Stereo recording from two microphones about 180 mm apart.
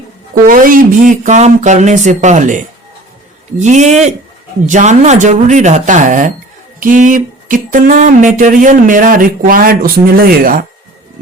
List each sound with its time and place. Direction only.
0.4 s speech: 50° right (ahead or behind)
3.6 s speech: 40° right (ahead or behind)